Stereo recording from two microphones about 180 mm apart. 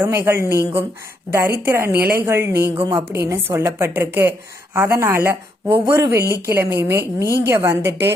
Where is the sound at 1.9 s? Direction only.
60° right (ahead or behind).